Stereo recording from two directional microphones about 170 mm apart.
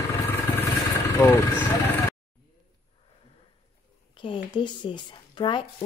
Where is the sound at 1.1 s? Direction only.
15° left (ahead or behind).